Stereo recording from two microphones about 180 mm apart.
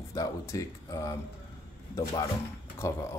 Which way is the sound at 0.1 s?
20° left (ahead or behind).